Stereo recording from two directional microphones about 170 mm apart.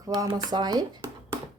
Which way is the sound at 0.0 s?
20° right (ahead or behind).